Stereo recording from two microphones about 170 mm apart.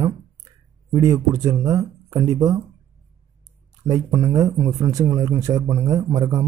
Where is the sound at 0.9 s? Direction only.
20° right (ahead or behind).